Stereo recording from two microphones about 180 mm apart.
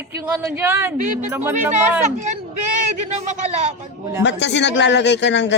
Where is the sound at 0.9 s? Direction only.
45° right (ahead or behind).